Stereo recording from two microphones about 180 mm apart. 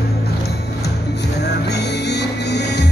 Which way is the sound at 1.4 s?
70° left (ahead or behind).